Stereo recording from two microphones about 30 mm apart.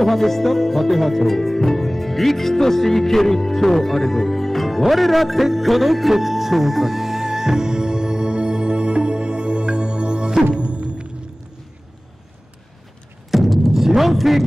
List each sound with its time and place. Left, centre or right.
0.0 s music: centre; by 10.4 s right
10.5 s music: right
13.3 s music: centre